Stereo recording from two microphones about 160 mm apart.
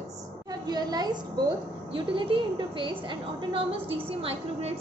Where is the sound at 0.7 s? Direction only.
25° right (ahead or behind).